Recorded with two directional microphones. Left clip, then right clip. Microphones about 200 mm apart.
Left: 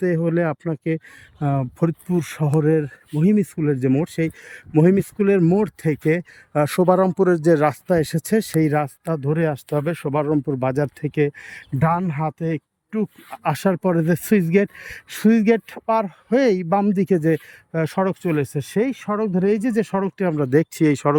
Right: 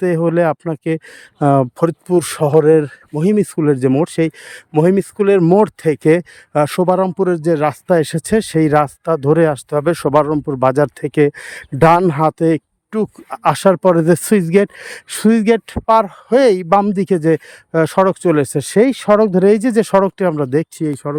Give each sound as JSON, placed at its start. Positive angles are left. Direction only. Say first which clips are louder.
{"t": 0.0, "sound": "speech", "louder": "right 7 dB", "side_deg": -15}
{"t": 1.4, "sound": "speech", "louder": "right 11 dB", "side_deg": -25}
{"t": 10.2, "sound": "speech", "louder": "right 6 dB", "side_deg": -10}